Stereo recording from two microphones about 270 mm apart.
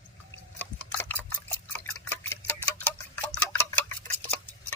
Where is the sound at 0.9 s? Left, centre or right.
Centre.